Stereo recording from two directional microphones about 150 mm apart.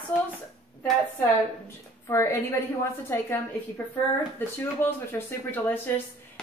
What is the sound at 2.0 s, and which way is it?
Speech, 20° left (ahead or behind).